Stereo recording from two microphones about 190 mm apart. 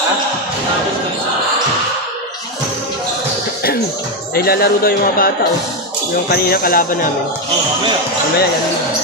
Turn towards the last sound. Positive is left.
turn(degrees=50)  # may be behind; listen again after turning